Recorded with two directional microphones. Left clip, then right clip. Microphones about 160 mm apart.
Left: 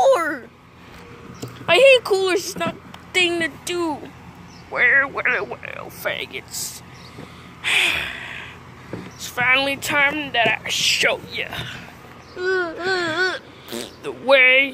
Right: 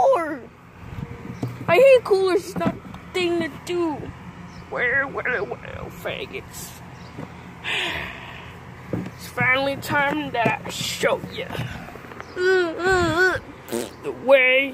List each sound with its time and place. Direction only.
0.0 s a sound: 5° left (ahead or behind)
1.7 s speech: centre (ahead or behind)
6.0 s speech: centre (ahead or behind)
7.6 s gasp: 5° left (ahead or behind)
9.3 s speech: 5° left (ahead or behind)
9.9 s speech: 10° right (ahead or behind)
10.8 s speech: 20° right (ahead or behind)
12.4 s babbling: 50° right (ahead or behind)
12.6 s speech: 35° right (ahead or behind)
14.0 s speech: centre (ahead or behind)